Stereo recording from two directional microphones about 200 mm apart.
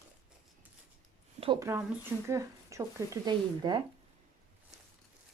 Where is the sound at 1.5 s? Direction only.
15° right (ahead or behind).